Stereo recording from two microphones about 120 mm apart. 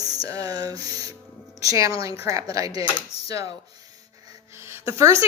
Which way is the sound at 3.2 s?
30° right (ahead or behind).